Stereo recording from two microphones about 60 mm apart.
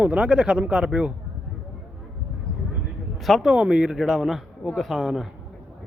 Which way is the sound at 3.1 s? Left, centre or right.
Centre.